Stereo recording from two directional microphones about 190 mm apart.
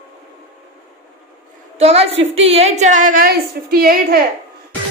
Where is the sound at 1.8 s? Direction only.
30° right (ahead or behind); by 4.2 s 50° right (ahead or behind).